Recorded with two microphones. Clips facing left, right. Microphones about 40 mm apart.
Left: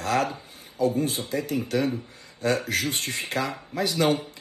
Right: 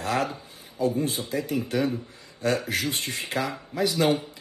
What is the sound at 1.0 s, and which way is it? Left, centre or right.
Speech, left.